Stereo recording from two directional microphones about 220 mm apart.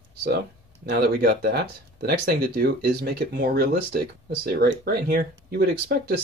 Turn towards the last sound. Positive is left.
turn(degrees=-45)  # may be behind; listen again after turning